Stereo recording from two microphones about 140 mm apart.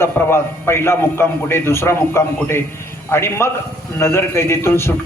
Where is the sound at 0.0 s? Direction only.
15° left (ahead or behind).